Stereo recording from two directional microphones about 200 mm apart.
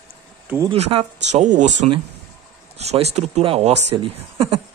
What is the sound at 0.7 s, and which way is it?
Speech, 35° right (ahead or behind).